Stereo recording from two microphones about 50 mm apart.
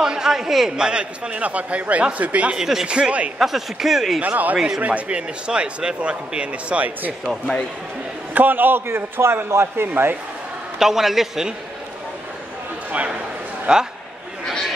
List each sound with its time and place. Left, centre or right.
0.0 s speech: centre
0.7 s speech: centre
2.5 s speech: centre
3.3 s speech: centre
4.2 s speech: right
4.6 s speech: centre
4.8 s speech: right
8.4 s a man's voice: right
10.8 s speech: centre
12.9 s a sound: right
13.7 s speech: right